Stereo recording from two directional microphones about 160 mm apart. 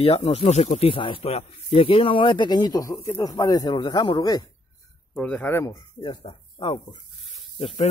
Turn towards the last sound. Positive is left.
turn(degrees=35)  # may be behind; listen again after turning